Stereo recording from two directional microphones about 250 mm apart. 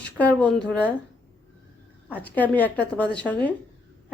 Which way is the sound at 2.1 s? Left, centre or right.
Centre.